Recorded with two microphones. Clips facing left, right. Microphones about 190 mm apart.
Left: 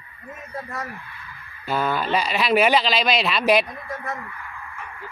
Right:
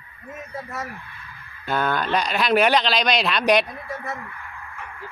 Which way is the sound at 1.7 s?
5° left (ahead or behind).